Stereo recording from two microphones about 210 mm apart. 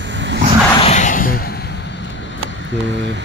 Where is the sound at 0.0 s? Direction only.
60° right (ahead or behind).